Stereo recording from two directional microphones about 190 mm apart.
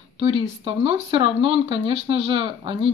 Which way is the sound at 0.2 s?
30° right (ahead or behind).